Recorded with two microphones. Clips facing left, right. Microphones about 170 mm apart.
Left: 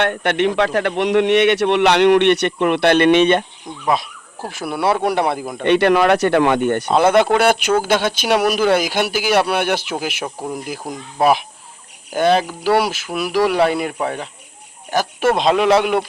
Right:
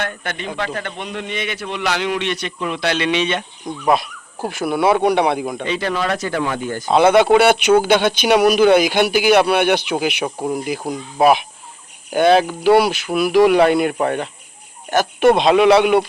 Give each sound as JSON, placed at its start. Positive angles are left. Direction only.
{"t": 0.0, "sound": "a man's voice", "side_deg": 70}
{"t": 3.8, "sound": "speech", "side_deg": 0}
{"t": 5.6, "sound": "a man's voice", "side_deg": 65}
{"t": 7.0, "sound": "speech", "side_deg": -10}